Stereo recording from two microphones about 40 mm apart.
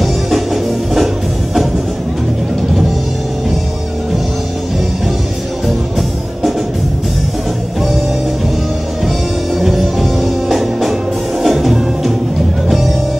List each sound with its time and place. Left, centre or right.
0.0 s music: centre
9.6 s music: centre